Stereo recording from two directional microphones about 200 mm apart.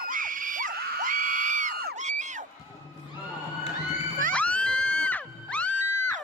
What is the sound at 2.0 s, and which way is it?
Crowd, 35° right (ahead or behind).